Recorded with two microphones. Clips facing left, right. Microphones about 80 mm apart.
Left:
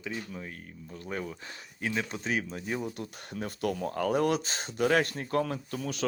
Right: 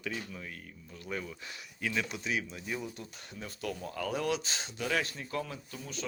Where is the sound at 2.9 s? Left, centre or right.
Left.